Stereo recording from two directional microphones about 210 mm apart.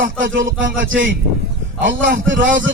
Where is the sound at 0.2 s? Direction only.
65° right (ahead or behind).